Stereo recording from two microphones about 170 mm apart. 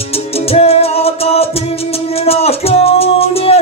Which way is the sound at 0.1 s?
35° left (ahead or behind).